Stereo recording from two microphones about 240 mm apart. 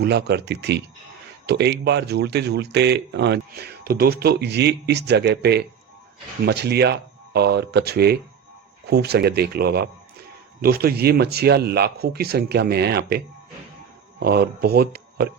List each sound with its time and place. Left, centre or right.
0.0 s speech: right